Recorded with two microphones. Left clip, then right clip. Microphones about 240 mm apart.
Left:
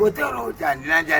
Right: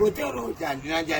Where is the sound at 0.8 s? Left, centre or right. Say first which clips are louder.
Left 8 dB; centre.